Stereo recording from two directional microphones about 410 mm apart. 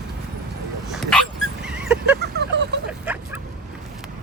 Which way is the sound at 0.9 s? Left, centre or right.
Centre.